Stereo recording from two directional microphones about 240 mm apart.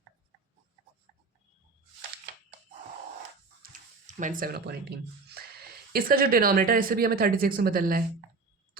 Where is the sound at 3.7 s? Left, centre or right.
Right.